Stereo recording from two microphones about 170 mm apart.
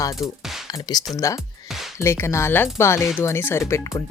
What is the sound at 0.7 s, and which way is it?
Speech, 25° left (ahead or behind).